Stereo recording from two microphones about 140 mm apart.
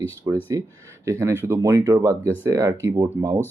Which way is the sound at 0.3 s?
25° right (ahead or behind).